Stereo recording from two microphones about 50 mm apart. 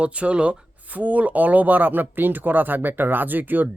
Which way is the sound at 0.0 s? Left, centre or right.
Right.